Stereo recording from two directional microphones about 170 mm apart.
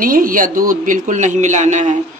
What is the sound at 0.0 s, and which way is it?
A woman's voice, 55° right (ahead or behind).